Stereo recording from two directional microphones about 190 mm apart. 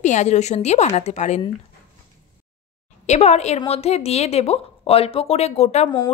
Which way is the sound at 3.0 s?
35° left (ahead or behind).